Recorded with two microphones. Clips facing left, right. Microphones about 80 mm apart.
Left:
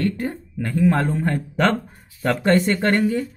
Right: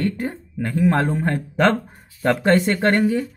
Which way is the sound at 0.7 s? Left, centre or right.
Right.